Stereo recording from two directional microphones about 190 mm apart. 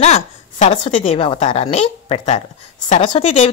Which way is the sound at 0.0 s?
35° left (ahead or behind).